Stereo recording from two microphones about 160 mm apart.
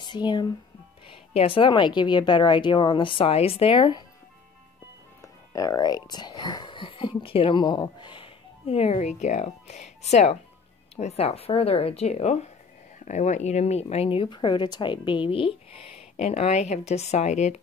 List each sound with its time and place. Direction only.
0.0 s a woman's voice: 30° left (ahead or behind)
5.2 s a woman's voice: 20° left (ahead or behind); by 17.6 s 45° left (ahead or behind)